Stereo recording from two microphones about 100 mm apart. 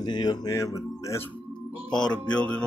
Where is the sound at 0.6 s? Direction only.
30° left (ahead or behind).